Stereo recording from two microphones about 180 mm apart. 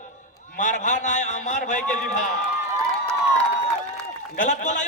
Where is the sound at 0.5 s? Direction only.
45° left (ahead or behind).